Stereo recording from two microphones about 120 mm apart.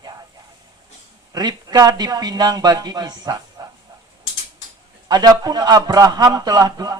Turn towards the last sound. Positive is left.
turn(degrees=-30)  # may be behind; listen again after turning